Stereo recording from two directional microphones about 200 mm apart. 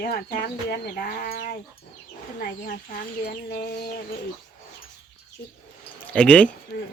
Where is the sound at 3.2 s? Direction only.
45° left (ahead or behind).